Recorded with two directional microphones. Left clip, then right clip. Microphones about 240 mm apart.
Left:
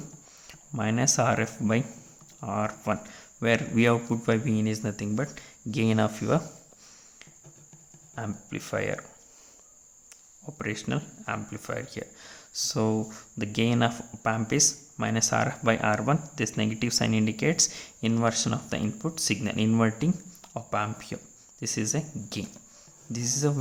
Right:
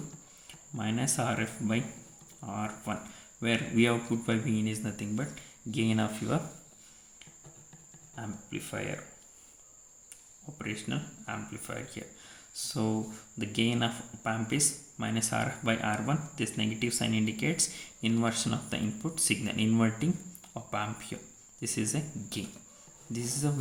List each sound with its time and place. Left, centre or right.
0.8 s speech: left
8.1 s speech: left
10.4 s speech: left